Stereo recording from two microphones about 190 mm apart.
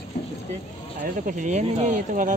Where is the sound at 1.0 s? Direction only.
45° right (ahead or behind).